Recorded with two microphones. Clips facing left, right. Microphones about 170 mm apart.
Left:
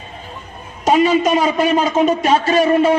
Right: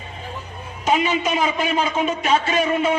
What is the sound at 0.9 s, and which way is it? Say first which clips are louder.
A man's voice: left 7 dB; 40° left (ahead or behind).